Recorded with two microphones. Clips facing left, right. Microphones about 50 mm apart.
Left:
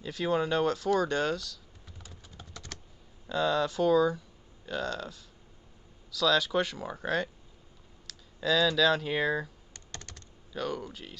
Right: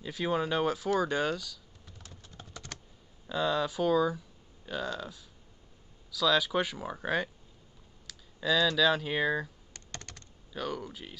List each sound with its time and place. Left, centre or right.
0.0 s speech: centre
2.0 s typing: centre
2.5 s typing: centre
3.3 s speech: centre
9.9 s typing: centre